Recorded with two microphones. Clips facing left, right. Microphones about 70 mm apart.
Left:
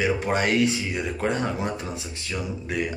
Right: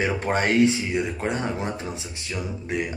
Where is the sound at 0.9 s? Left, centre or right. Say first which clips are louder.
Even; centre.